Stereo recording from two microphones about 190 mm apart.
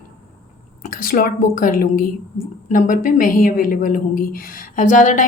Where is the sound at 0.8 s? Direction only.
50° left (ahead or behind).